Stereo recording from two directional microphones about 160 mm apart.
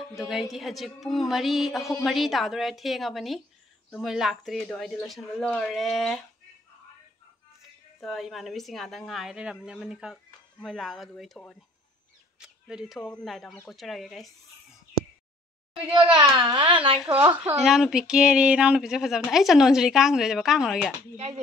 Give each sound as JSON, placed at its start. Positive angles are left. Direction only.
{"t": 0.3, "sound": "a woman's voice", "side_deg": 0}
{"t": 8.0, "sound": "a woman's voice", "side_deg": 0}
{"t": 16.1, "sound": "a child's voice", "side_deg": -25}
{"t": 17.6, "sound": "a woman's voice", "side_deg": 0}